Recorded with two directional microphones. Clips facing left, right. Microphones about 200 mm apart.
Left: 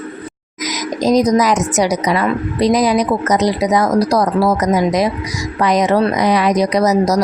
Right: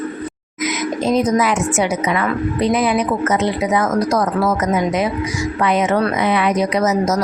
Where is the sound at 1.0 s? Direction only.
40° left (ahead or behind).